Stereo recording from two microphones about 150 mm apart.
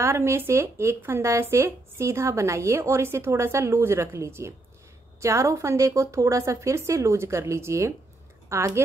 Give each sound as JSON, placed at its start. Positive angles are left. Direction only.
{"t": 0.0, "sound": "a woman's voice", "side_deg": -15}